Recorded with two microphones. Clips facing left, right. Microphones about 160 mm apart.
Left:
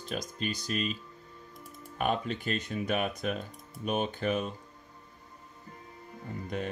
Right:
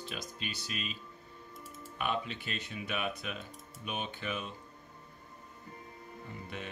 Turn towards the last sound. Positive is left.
turn(degrees=40)  # may be behind; listen again after turning